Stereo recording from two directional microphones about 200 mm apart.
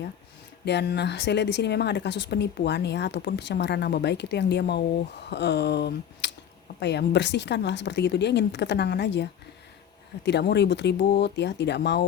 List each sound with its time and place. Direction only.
0.6 s a woman's voice: 55° left (ahead or behind)
10.2 s a woman's voice: 55° left (ahead or behind)